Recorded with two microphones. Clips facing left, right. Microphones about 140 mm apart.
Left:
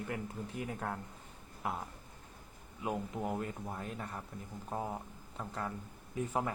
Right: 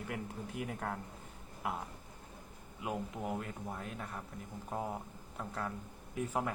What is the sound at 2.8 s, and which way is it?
Speech, centre (ahead or behind).